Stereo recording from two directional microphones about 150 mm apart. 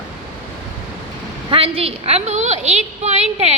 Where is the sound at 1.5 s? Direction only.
35° right (ahead or behind).